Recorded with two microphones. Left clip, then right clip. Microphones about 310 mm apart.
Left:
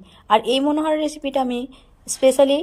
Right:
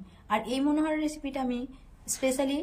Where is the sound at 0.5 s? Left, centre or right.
Left.